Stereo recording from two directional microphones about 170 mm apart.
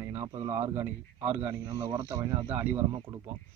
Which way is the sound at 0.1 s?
20° right (ahead or behind).